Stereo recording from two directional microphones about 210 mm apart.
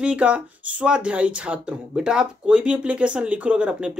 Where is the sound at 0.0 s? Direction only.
5° right (ahead or behind).